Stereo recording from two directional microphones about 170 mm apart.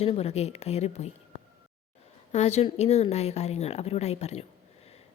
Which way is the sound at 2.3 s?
40° left (ahead or behind).